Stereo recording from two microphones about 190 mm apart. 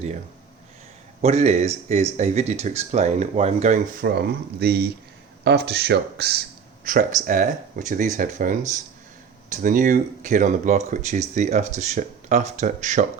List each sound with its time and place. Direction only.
1.2 s speech: 35° right (ahead or behind)
4.0 s speech: 55° right (ahead or behind)
6.8 s speech: 45° right (ahead or behind)